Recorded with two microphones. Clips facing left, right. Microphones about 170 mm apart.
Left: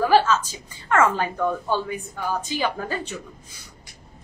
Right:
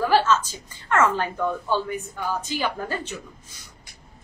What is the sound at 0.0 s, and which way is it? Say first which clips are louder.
A woman's voice: left 2 dB; 10° left (ahead or behind).